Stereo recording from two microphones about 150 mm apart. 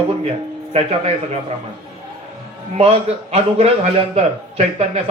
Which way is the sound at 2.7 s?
45° right (ahead or behind).